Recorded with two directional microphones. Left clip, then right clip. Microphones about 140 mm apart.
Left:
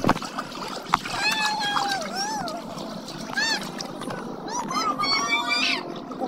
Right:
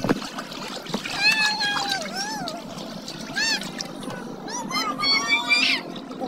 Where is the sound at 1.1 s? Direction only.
30° right (ahead or behind).